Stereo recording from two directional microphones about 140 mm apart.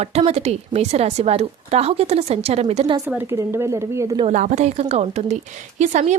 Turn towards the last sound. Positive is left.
turn(degrees=-60)  # may be behind; listen again after turning